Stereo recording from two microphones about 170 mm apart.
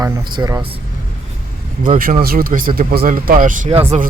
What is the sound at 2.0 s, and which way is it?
Speech, 60° right (ahead or behind).